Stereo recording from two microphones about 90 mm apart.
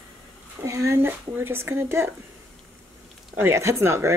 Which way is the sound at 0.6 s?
35° right (ahead or behind).